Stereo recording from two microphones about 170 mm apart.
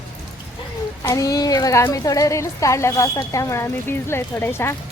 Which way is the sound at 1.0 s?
20° left (ahead or behind).